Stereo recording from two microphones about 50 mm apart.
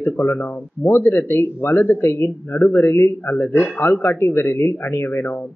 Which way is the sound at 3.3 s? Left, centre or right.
Left.